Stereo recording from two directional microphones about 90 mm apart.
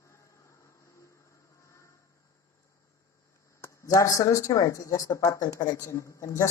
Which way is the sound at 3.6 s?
35° left (ahead or behind).